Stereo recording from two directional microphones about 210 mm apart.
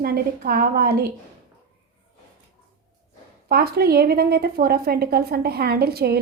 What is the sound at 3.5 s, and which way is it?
A woman's voice, 45° right (ahead or behind).